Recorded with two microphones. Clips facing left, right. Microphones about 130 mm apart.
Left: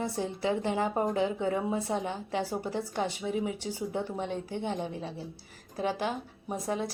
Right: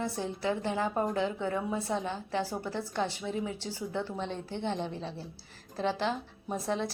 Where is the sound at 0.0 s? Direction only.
20° left (ahead or behind).